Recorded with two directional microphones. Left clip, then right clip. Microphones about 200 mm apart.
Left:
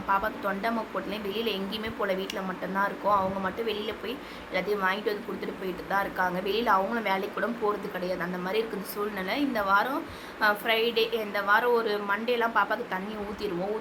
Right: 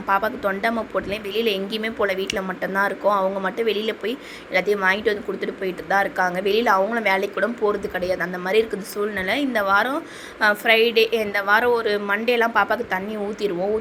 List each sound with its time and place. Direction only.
0.1 s speech: 25° right (ahead or behind)